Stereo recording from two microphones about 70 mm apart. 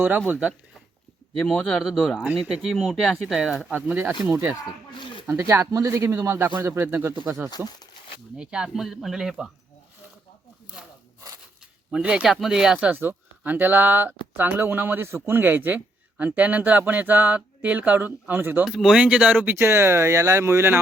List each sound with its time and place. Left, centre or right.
0.3 s speech: centre
1.7 s speech: centre
2.0 s speech: centre
3.7 s speech: right
5.2 s speech: right
5.7 s speech: right
8.4 s speech: centre
11.9 s speech: centre
13.0 s speech: right
18.7 s speech: centre
18.9 s speech: centre
19.5 s speech: right